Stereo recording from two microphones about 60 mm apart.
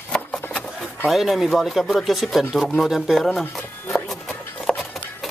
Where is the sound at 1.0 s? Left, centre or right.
Centre.